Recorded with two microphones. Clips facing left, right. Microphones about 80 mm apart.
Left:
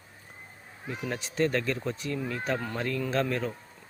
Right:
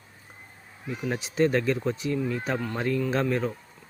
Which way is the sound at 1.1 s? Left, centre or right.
Centre.